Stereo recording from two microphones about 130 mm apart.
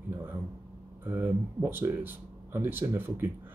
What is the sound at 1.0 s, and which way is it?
Speech, 15° right (ahead or behind).